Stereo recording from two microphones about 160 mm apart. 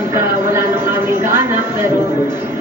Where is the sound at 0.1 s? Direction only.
15° right (ahead or behind).